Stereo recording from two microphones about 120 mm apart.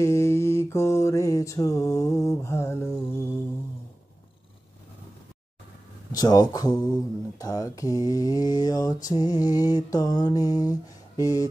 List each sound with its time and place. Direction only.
0.0 s mantra: 25° left (ahead or behind)
6.1 s speech: 35° left (ahead or behind)